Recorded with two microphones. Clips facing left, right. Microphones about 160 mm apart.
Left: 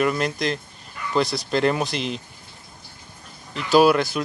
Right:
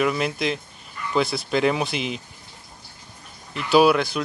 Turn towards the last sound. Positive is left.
turn(degrees=0)  # may be behind; listen again after turning